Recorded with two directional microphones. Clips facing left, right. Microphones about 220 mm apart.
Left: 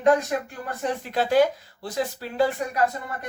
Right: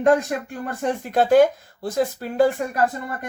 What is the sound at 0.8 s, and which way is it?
Speech, 50° right (ahead or behind).